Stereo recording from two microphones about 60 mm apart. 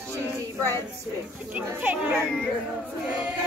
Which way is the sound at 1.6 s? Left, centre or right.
Right.